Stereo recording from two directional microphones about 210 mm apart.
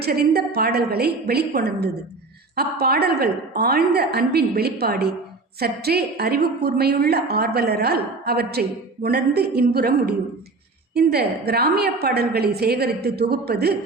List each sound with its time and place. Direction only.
0.0 s a woman's voice: 50° right (ahead or behind)